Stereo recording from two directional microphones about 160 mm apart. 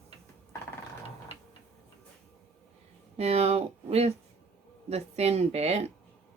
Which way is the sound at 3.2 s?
40° right (ahead or behind).